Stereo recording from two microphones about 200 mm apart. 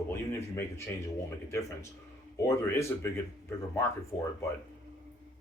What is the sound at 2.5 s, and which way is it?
Speech, 15° left (ahead or behind).